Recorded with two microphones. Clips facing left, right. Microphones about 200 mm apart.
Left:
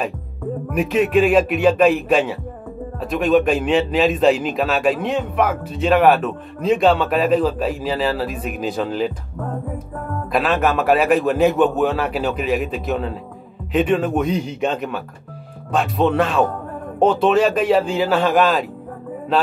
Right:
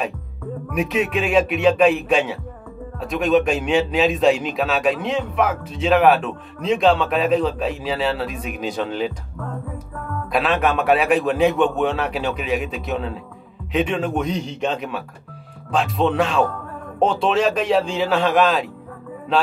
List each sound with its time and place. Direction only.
0.7 s a man's voice: centre (ahead or behind)
9.4 s music: 40° left (ahead or behind)
10.3 s a man's voice: centre (ahead or behind)